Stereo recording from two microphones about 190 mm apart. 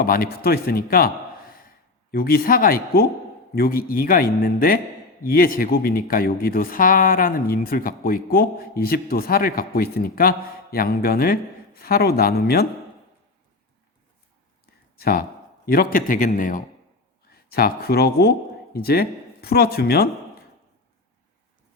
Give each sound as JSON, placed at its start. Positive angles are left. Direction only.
{"t": 0.0, "sound": "speech", "side_deg": 50}
{"t": 2.1, "sound": "speech", "side_deg": 55}
{"t": 14.9, "sound": "speech", "side_deg": 50}